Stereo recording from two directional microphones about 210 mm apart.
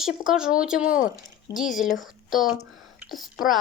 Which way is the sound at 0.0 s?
5° right (ahead or behind).